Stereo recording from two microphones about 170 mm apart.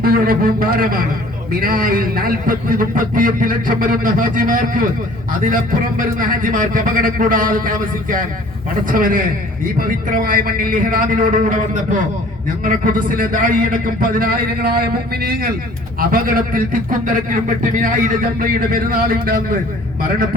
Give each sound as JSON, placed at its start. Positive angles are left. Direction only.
{"t": 0.0, "sound": "a man's voice", "side_deg": -60}